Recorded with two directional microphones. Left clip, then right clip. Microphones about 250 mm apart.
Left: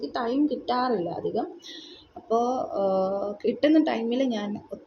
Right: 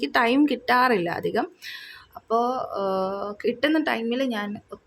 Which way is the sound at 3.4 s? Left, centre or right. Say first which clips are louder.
Left 1 dB; right.